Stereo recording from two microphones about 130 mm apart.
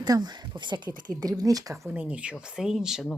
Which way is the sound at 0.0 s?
35° right (ahead or behind).